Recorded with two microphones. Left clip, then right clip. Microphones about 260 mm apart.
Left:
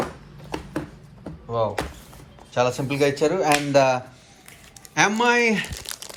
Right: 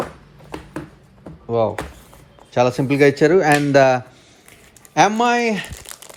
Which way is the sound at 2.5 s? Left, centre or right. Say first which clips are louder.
Right 5 dB; right.